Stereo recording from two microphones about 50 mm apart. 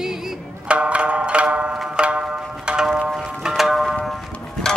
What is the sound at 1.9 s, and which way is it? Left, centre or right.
Music, centre.